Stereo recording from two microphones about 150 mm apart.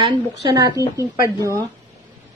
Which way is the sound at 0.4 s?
25° right (ahead or behind).